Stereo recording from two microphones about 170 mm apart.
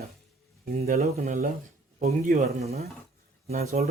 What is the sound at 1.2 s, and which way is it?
Speech, 50° right (ahead or behind).